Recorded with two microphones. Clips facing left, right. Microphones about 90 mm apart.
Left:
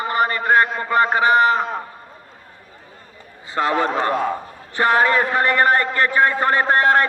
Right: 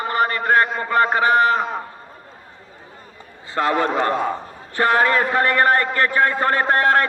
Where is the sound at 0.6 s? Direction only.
Centre (ahead or behind).